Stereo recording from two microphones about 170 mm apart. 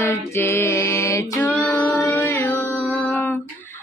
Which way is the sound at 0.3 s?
15° left (ahead or behind).